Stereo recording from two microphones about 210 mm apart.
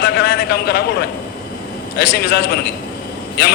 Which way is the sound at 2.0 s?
50° left (ahead or behind).